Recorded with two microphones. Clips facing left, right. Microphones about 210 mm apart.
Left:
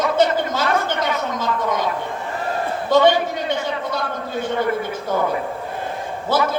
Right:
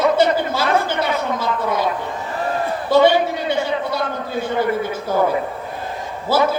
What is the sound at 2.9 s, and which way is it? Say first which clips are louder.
A man's voice: right 1 dB; 10° right (ahead or behind).